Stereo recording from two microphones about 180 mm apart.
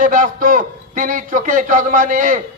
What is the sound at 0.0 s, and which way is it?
A man's voice, 45° right (ahead or behind).